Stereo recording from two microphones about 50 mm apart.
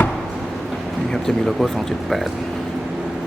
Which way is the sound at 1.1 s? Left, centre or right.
Centre.